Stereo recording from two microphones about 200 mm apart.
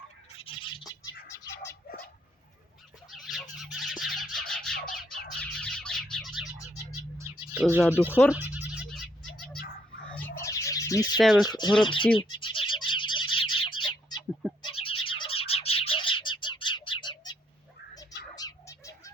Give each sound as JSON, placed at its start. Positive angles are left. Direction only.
{"t": 0.4, "sound": "bird", "side_deg": 25}
{"t": 1.3, "sound": "scratch", "side_deg": 15}
{"t": 3.1, "sound": "fowl", "side_deg": 0}
{"t": 3.6, "sound": "music", "side_deg": 0}
{"t": 7.2, "sound": "bird", "side_deg": -10}
{"t": 7.9, "sound": "speech", "side_deg": -10}
{"t": 8.3, "sound": "a sound", "side_deg": -10}
{"t": 10.3, "sound": "a sound", "side_deg": 15}
{"t": 11.2, "sound": "speech", "side_deg": 0}
{"t": 11.4, "sound": "speech", "side_deg": 20}
{"t": 12.1, "sound": "a sound", "side_deg": 25}
{"t": 13.6, "sound": "bird", "side_deg": 25}
{"t": 14.6, "sound": "music", "side_deg": 25}
{"t": 18.3, "sound": "bird", "side_deg": 15}